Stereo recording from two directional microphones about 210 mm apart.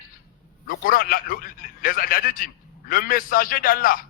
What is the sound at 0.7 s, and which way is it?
A man's voice, 45° left (ahead or behind).